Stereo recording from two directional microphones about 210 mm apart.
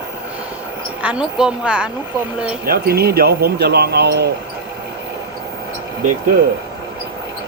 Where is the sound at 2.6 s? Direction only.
45° right (ahead or behind).